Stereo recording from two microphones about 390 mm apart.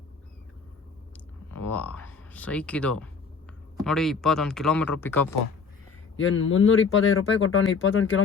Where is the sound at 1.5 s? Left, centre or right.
Centre.